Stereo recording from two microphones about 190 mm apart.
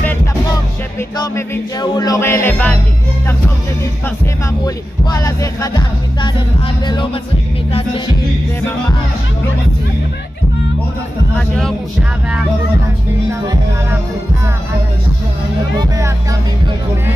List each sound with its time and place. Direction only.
1.1 s music: 20° left (ahead or behind)
4.6 s music: 20° left (ahead or behind)
11.3 s speech: 5° left (ahead or behind)
13.3 s music: 15° right (ahead or behind)